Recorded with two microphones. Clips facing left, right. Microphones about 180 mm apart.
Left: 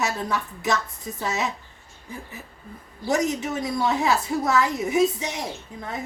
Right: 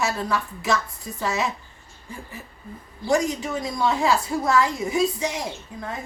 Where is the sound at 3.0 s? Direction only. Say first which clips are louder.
Right 1 dB; 20° left (ahead or behind).